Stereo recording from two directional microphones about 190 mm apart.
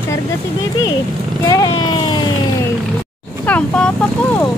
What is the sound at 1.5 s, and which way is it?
Speech, 20° left (ahead or behind).